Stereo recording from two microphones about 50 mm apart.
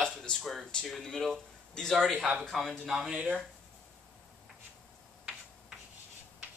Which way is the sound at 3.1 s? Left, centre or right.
Right.